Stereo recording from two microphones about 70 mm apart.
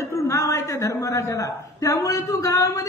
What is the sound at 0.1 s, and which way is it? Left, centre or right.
A man's voice, left.